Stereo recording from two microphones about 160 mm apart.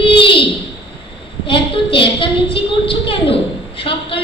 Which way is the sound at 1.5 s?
30° left (ahead or behind).